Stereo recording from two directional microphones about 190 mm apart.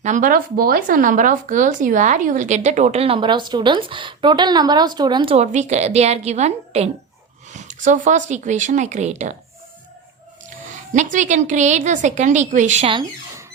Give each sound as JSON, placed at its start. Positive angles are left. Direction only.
{"t": 0.0, "sound": "speech", "side_deg": -40}
{"t": 10.9, "sound": "speech", "side_deg": -40}